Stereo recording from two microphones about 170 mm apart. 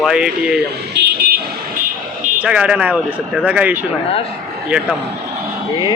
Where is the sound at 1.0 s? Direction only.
70° right (ahead or behind).